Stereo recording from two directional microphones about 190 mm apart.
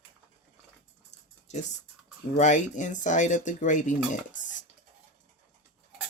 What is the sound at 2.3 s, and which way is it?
Speech, 40° left (ahead or behind).